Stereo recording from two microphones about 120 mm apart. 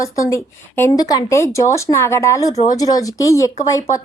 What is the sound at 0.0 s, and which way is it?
A woman's voice, 25° left (ahead or behind).